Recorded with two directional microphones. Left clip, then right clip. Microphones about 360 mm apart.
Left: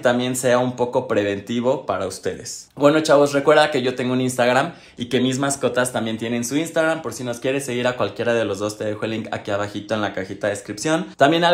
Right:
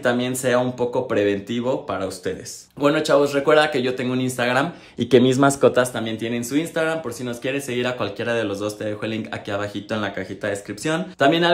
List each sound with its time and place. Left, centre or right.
0.0 s speech: centre
4.9 s speech: right
5.8 s speech: centre